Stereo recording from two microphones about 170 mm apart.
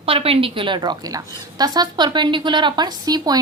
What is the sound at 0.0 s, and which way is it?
A woman's voice, 35° right (ahead or behind).